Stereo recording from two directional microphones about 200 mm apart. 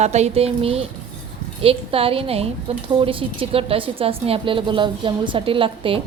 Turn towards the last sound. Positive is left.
turn(degrees=-25)  # may be behind; listen again after turning